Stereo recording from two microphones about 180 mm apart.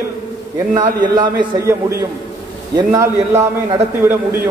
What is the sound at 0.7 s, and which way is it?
A man's voice, 20° right (ahead or behind).